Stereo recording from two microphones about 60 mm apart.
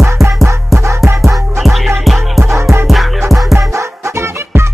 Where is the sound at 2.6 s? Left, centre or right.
Right.